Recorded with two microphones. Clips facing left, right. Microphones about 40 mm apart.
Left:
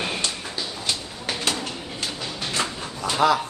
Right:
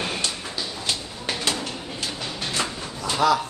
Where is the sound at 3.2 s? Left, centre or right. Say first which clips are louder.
Even; left.